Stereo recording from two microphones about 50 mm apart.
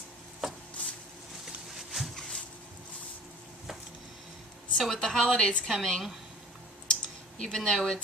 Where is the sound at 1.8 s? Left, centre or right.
Centre.